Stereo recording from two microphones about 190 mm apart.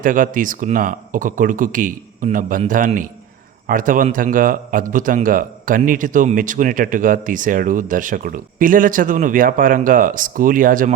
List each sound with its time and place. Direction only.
0.0 s a man's voice: 45° right (ahead or behind)